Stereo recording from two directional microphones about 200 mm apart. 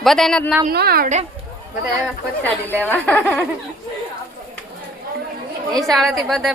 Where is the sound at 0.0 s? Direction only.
Centre (ahead or behind).